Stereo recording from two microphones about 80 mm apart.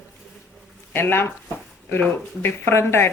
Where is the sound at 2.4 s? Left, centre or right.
Left.